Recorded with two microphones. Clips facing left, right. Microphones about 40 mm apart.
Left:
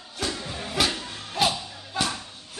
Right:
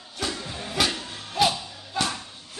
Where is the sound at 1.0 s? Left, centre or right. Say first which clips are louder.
Right 2 dB; centre.